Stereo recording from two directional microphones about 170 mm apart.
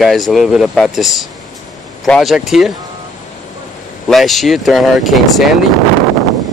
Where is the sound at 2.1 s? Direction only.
Centre (ahead or behind).